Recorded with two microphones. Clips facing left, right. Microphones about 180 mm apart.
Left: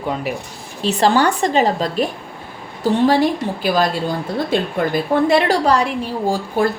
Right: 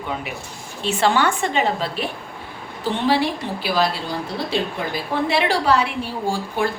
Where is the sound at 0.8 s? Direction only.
35° left (ahead or behind).